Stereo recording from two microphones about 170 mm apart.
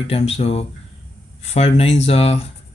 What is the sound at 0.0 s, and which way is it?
Speech, 35° left (ahead or behind).